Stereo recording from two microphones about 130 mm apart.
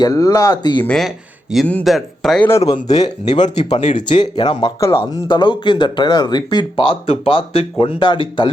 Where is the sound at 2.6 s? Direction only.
30° left (ahead or behind).